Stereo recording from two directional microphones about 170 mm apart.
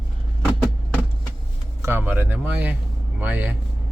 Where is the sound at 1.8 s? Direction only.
10° right (ahead or behind).